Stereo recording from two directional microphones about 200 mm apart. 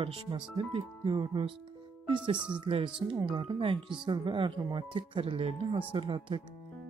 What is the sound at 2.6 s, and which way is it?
Speech, 25° right (ahead or behind).